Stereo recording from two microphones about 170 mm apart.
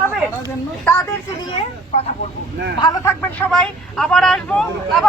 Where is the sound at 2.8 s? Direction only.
25° left (ahead or behind).